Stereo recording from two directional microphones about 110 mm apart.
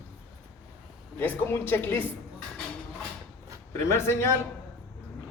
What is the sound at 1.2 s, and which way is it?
Speech, 20° left (ahead or behind).